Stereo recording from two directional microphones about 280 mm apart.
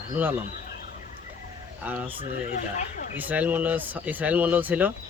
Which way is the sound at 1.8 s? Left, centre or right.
Centre.